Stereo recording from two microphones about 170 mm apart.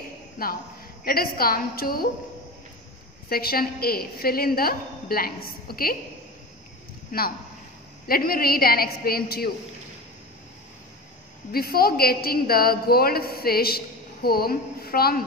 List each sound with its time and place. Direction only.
0.4 s a man's voice: 60° left (ahead or behind)
3.3 s a man's voice: 60° left (ahead or behind)
7.1 s a man's voice: 60° left (ahead or behind)
11.5 s a man's voice: 65° left (ahead or behind)